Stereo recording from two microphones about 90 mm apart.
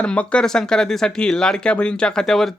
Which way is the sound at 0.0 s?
10° left (ahead or behind).